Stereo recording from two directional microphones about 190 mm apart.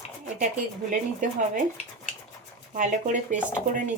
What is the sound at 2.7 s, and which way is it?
Speech, 40° right (ahead or behind).